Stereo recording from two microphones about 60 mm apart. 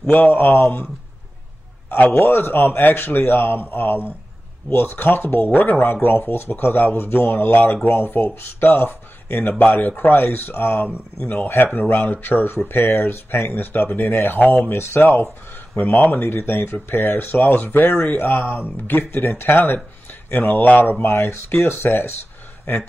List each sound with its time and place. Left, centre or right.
0.1 s speech: left
1.9 s a man's voice: left
2.2 s speech: left
14.7 s speech: left
15.7 s speech: left
20.7 s a man's voice: left
21.0 s speech: left